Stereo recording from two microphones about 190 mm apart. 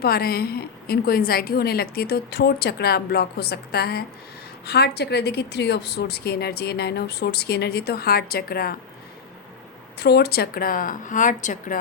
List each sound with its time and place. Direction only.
0.0 s a woman's voice: 55° left (ahead or behind)
10.0 s a woman's voice: 55° left (ahead or behind); by 11.8 s 40° left (ahead or behind)